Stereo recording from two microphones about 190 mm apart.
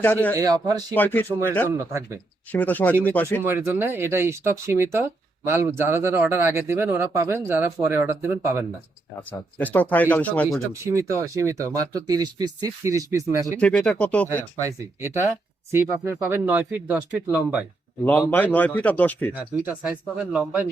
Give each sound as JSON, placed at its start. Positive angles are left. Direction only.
{"t": 0.0, "sound": "a man's voice", "side_deg": 10}
{"t": 0.3, "sound": "a man's voice", "side_deg": -20}
{"t": 0.9, "sound": "a man's voice", "side_deg": 10}
{"t": 1.9, "sound": "speech", "side_deg": -15}
{"t": 2.5, "sound": "a man's voice", "side_deg": 10}
{"t": 3.4, "sound": "speech", "side_deg": -10}
{"t": 9.6, "sound": "a man's voice", "side_deg": 10}
{"t": 10.7, "sound": "speech", "side_deg": -15}
{"t": 13.6, "sound": "a man's voice", "side_deg": 5}
{"t": 14.6, "sound": "speech", "side_deg": -15}
{"t": 18.0, "sound": "a man's voice", "side_deg": 10}
{"t": 19.4, "sound": "speech", "side_deg": -10}